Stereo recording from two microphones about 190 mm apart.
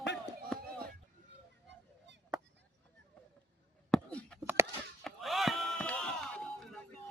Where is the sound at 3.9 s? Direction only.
5° left (ahead or behind).